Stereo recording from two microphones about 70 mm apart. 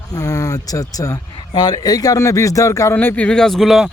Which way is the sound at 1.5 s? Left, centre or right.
Left.